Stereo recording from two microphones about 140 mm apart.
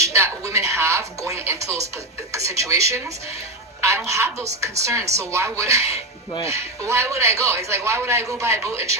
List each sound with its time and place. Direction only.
0.0 s music: 20° right (ahead or behind)
2.3 s a woman's voice: 20° right (ahead or behind)